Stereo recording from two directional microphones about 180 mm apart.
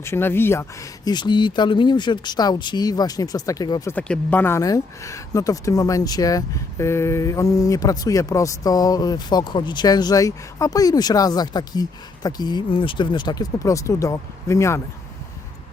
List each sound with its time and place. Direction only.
0.0 s speech: 15° left (ahead or behind)
3.9 s speech: 10° left (ahead or behind)